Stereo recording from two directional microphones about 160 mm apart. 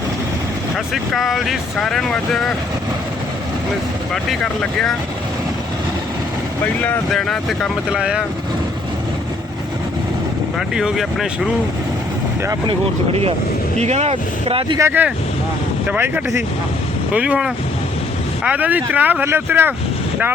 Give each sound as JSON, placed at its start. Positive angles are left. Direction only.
{"t": 1.1, "sound": "speech", "side_deg": 0}
{"t": 4.1, "sound": "speech", "side_deg": 5}
{"t": 6.8, "sound": "speech", "side_deg": 5}
{"t": 10.8, "sound": "speech", "side_deg": -5}
{"t": 13.7, "sound": "speech", "side_deg": -40}
{"t": 14.8, "sound": "speech", "side_deg": -15}